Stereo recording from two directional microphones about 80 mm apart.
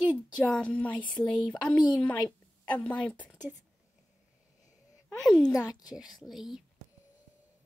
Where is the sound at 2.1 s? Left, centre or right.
Left.